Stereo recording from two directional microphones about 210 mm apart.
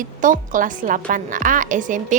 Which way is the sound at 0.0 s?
40° right (ahead or behind).